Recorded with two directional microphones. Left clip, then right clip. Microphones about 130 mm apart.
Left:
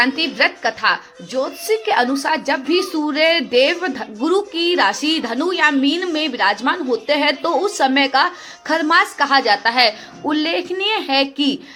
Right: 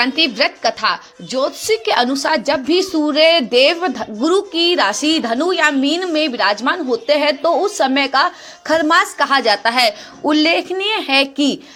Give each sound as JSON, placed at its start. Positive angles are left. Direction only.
{"t": 0.0, "sound": "a woman's voice", "side_deg": -45}